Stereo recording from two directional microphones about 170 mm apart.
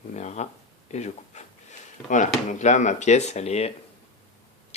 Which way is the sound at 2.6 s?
45° left (ahead or behind).